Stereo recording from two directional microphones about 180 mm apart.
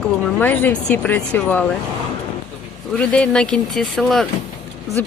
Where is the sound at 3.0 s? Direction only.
5° left (ahead or behind).